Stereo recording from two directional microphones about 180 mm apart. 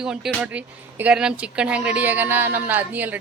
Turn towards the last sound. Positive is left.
turn(degrees=-10)  # may be behind; listen again after turning